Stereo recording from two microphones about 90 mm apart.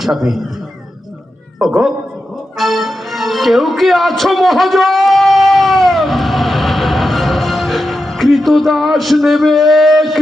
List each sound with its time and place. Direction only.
0.0 s a man's voice: centre (ahead or behind)
2.6 s music: centre (ahead or behind)